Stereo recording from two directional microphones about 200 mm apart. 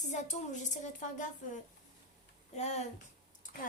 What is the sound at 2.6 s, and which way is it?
Speech, 35° left (ahead or behind).